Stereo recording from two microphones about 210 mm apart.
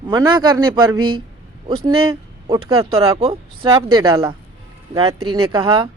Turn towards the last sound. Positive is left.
turn(degrees=-20)  # may be behind; listen again after turning